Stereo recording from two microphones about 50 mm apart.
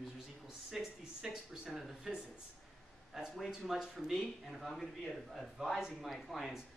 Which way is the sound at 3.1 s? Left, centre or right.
Centre.